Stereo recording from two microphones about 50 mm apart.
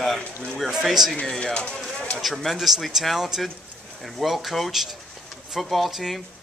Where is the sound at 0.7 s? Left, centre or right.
Centre.